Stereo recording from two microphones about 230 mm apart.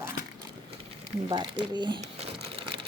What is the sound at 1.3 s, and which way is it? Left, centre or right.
Crumpling, right.